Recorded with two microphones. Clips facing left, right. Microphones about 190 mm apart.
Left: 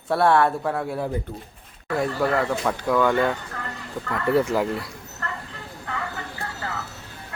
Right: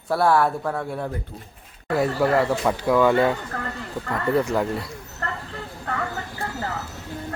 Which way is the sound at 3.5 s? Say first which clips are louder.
Right 4 dB; 60° right (ahead or behind).